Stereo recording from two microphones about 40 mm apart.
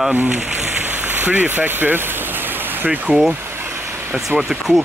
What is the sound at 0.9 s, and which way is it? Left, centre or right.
Rain on surface, right.